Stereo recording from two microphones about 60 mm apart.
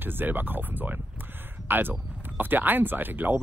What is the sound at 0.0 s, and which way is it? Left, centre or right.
Speech, right.